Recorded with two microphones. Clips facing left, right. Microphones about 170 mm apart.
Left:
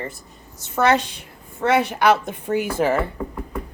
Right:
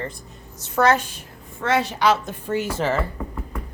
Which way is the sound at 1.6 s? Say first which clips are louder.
Left 3 dB; 55° left (ahead or behind).